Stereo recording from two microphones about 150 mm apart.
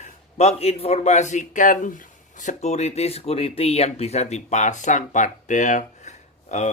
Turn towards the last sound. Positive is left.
turn(degrees=50)  # may be behind; listen again after turning